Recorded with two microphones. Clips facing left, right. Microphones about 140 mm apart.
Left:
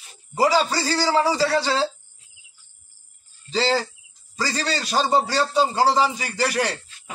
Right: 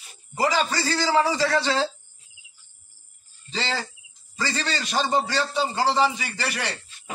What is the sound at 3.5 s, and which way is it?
A man's voice, 35° left (ahead or behind).